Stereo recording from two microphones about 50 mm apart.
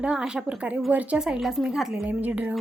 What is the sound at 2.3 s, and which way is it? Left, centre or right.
Speech, right.